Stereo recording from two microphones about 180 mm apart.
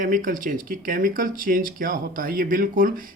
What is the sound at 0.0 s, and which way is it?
Speech, 50° right (ahead or behind).